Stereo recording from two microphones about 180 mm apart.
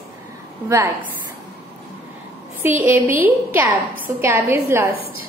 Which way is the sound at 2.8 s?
15° right (ahead or behind).